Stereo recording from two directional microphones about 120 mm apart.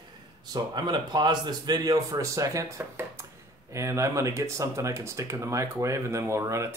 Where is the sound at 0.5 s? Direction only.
35° right (ahead or behind).